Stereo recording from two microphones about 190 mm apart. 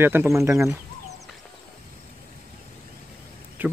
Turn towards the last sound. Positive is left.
turn(degrees=-10)  # may be behind; listen again after turning